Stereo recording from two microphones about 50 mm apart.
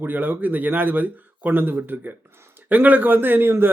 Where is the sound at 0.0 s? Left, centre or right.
Right.